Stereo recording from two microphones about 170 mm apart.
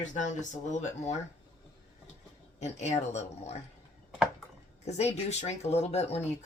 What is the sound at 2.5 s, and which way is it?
Speech, 40° left (ahead or behind).